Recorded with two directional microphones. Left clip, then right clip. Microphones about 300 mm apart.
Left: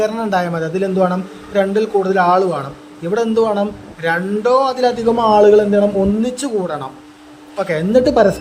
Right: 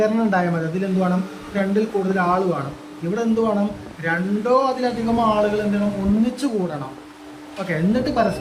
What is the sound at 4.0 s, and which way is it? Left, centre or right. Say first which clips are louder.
Speech: left 6 dB; centre.